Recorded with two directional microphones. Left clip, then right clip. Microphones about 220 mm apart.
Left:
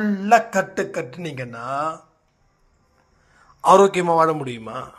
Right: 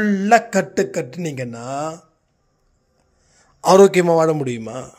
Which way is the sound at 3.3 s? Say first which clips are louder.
Even; 50° right (ahead or behind).